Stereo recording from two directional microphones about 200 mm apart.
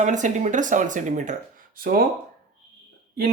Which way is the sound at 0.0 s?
40° right (ahead or behind).